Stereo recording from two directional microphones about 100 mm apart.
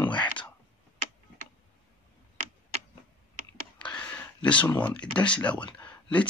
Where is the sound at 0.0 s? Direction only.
15° left (ahead or behind).